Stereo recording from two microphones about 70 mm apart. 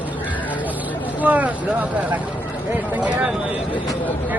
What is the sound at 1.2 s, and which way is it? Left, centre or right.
Speech, right.